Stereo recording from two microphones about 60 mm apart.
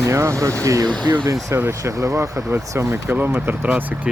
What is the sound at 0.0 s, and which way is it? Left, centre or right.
Speech, right.